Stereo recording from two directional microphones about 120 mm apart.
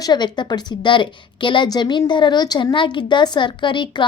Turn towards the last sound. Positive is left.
turn(degrees=40)  # may be behind; listen again after turning